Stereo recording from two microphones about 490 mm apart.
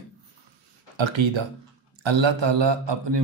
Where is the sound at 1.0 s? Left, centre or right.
Right.